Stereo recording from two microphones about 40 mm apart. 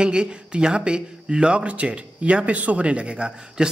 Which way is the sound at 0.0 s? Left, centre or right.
Right.